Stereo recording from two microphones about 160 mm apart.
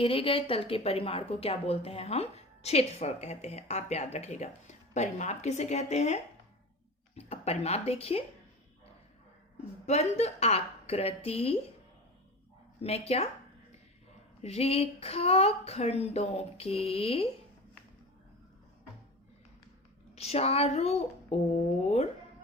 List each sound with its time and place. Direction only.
0.0 s a woman's voice: 35° left (ahead or behind)
7.2 s a woman's voice: 40° left (ahead or behind)
9.8 s a woman's voice: 40° left (ahead or behind)
12.8 s a woman's voice: 40° left (ahead or behind)
14.4 s a woman's voice: 40° left (ahead or behind)
20.1 s a woman's voice: 40° left (ahead or behind)